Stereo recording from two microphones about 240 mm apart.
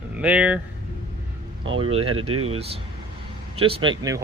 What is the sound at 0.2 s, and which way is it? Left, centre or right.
Speech, centre.